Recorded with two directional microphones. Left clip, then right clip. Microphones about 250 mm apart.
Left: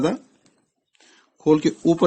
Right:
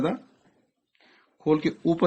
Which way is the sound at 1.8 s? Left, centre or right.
Left.